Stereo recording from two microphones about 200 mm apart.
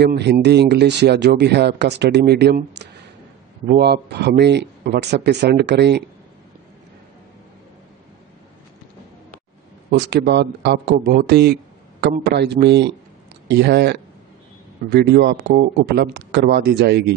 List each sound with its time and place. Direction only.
0.0 s speech: 55° right (ahead or behind)
9.8 s speech: 55° right (ahead or behind)